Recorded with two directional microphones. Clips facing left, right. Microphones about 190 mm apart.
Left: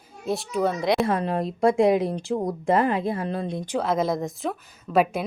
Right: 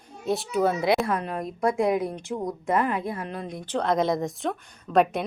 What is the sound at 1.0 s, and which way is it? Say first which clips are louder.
Speech: left 4 dB; 30° left (ahead or behind).